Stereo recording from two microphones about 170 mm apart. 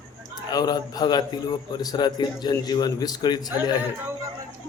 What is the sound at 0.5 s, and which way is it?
A man's voice, 25° left (ahead or behind).